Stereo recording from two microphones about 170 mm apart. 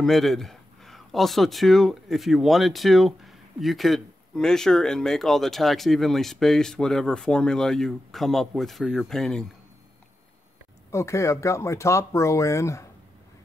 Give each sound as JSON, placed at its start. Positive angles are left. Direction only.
{"t": 0.0, "sound": "speech", "side_deg": 0}
{"t": 10.9, "sound": "speech", "side_deg": 15}